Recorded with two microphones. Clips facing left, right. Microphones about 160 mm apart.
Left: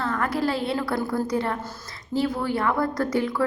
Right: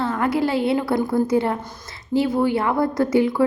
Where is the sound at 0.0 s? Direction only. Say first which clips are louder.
Right 4 dB; 25° right (ahead or behind).